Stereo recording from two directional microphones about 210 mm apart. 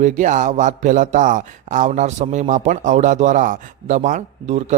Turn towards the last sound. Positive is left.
turn(degrees=-35)  # may be behind; listen again after turning